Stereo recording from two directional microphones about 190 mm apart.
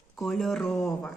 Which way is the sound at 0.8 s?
15° left (ahead or behind).